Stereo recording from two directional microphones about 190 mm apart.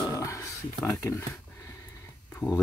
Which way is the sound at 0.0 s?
15° left (ahead or behind).